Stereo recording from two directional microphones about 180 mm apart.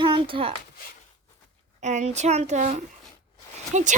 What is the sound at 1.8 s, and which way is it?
A child's voice, 40° right (ahead or behind).